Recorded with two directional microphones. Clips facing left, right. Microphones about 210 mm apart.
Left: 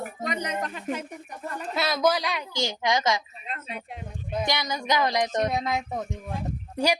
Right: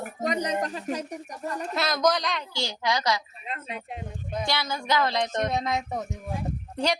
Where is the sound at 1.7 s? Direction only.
5° left (ahead or behind); by 3.2 s 25° left (ahead or behind).